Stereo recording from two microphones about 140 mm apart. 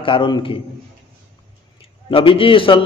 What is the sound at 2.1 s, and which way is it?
Speech, 40° left (ahead or behind).